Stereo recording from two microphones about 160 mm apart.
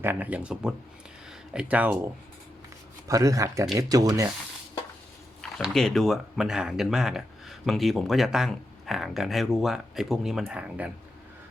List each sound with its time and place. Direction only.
0.0 s speech: 10° right (ahead or behind)
3.1 s speech: 20° right (ahead or behind)
5.4 s speech: 5° left (ahead or behind)